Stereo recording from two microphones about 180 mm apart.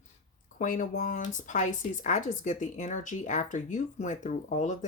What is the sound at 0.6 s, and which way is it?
A woman's voice, 45° left (ahead or behind).